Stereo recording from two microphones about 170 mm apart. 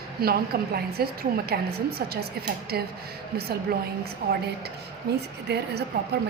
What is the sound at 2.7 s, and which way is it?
Speech, 65° right (ahead or behind).